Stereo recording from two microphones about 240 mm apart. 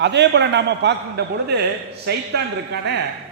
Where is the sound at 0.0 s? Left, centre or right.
Right.